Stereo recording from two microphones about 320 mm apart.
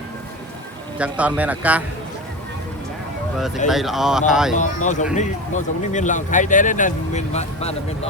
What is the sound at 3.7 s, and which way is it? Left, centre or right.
Speech, centre.